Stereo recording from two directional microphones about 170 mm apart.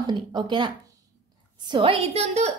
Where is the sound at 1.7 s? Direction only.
35° right (ahead or behind).